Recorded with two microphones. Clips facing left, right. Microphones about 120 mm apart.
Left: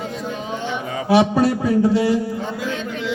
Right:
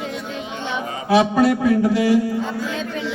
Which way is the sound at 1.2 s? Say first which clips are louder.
Right 1 dB; 30° left (ahead or behind).